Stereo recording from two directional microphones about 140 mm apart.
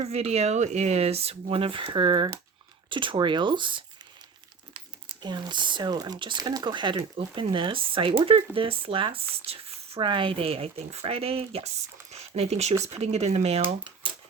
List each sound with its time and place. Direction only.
0.0 s speech: 50° right (ahead or behind)